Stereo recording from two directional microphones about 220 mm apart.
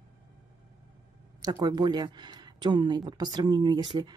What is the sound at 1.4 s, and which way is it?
Speech, 15° right (ahead or behind).